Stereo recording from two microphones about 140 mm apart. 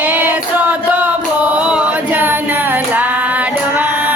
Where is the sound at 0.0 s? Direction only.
10° right (ahead or behind).